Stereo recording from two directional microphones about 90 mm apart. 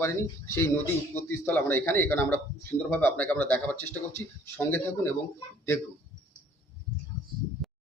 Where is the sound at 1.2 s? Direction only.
20° left (ahead or behind).